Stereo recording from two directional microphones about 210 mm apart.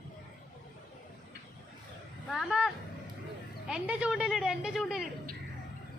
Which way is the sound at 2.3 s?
Centre (ahead or behind).